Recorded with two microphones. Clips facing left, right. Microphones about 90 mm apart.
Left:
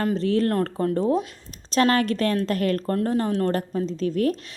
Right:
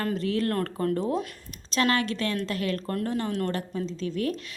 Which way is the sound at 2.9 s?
35° left (ahead or behind).